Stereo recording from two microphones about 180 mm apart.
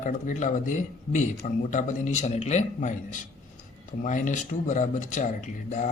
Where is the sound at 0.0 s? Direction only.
45° left (ahead or behind).